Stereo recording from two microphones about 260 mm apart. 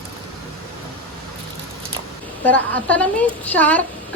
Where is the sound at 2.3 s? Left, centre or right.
Centre.